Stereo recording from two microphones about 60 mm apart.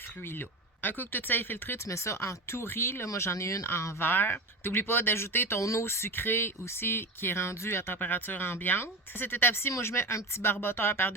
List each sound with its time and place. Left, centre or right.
0.2 s speech: left
1.8 s speech: left
3.1 s speech: left
7.9 s speech: left